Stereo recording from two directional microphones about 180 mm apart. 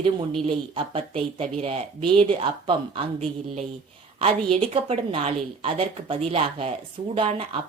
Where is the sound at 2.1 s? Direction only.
30° right (ahead or behind).